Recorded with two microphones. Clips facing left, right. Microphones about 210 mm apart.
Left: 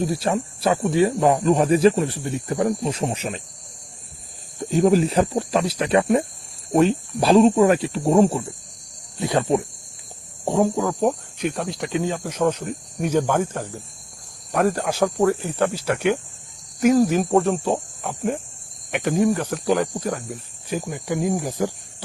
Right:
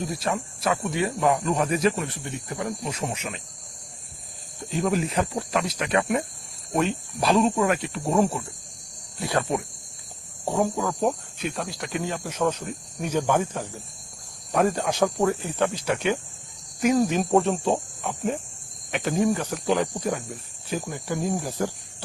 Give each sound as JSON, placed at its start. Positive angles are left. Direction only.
{"t": 0.0, "sound": "speech", "side_deg": 30}
{"t": 2.8, "sound": "speech", "side_deg": 30}
{"t": 4.7, "sound": "speech", "side_deg": 35}
{"t": 10.4, "sound": "speech", "side_deg": 15}
{"t": 13.2, "sound": "speech", "side_deg": -10}
{"t": 13.6, "sound": "speech", "side_deg": 10}
{"t": 17.7, "sound": "cricket", "side_deg": 5}
{"t": 18.9, "sound": "speech", "side_deg": 10}
{"t": 19.5, "sound": "speech", "side_deg": 0}
{"t": 20.7, "sound": "speech", "side_deg": 10}